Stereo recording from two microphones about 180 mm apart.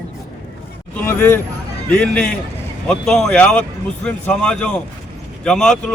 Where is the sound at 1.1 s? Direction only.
10° left (ahead or behind).